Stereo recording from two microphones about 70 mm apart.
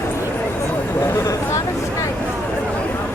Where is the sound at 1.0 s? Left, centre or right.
Left.